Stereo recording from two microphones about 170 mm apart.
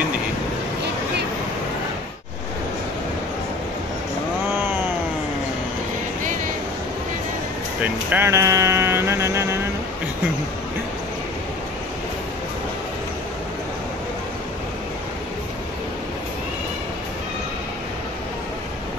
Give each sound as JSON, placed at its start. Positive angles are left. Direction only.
{"t": 7.8, "sound": "speech", "side_deg": -10}